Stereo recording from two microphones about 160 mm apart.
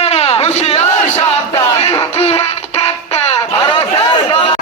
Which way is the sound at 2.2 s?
40° left (ahead or behind).